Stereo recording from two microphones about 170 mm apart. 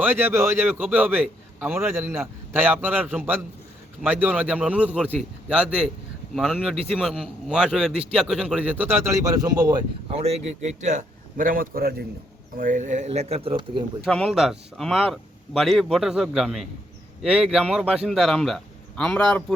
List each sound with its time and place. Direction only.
0.0 s a man's voice: 10° right (ahead or behind)
10.1 s a man's voice: 35° right (ahead or behind); by 12.0 s 60° right (ahead or behind)
12.5 s speech: 50° right (ahead or behind); by 13.8 s 30° right (ahead or behind)
14.0 s a man's voice: centre (ahead or behind)